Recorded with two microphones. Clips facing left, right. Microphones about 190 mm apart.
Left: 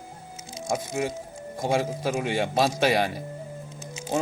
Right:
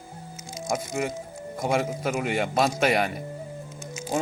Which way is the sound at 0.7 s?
30° left (ahead or behind).